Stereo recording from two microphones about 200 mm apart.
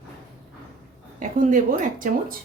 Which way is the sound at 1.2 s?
40° right (ahead or behind).